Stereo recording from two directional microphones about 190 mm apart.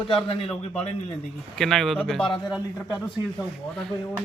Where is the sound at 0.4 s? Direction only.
5° left (ahead or behind).